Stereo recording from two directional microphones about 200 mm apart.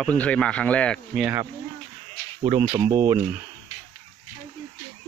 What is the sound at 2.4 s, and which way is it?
Speech, 25° right (ahead or behind).